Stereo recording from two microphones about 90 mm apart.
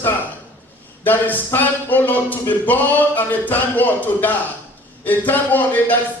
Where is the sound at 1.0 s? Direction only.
20° left (ahead or behind).